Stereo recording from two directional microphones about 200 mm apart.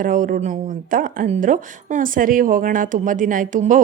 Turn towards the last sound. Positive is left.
turn(degrees=-40)  # may be behind; listen again after turning